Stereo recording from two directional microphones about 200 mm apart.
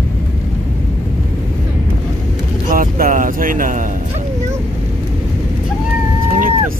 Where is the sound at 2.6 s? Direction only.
45° right (ahead or behind).